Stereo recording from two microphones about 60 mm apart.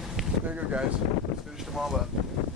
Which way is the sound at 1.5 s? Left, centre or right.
Centre.